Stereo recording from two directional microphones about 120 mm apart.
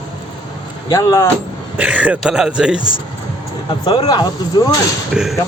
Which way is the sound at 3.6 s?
45° left (ahead or behind).